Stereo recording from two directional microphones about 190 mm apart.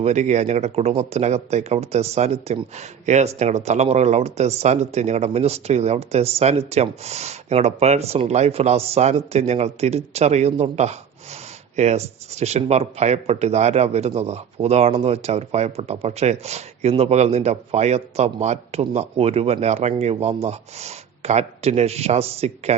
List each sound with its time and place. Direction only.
0.0 s speech: 35° right (ahead or behind)